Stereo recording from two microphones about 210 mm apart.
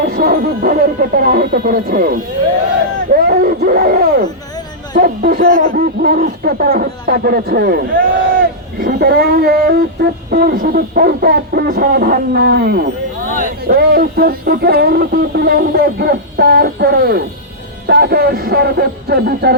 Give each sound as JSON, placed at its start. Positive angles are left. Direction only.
{"t": 0.0, "sound": "speech", "side_deg": -45}
{"t": 3.2, "sound": "speech", "side_deg": -45}